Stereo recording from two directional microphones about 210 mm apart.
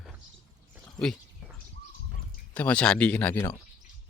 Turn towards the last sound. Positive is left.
turn(degrees=10)  # may be behind; listen again after turning